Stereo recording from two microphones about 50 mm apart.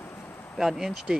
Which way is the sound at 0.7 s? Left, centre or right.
Centre.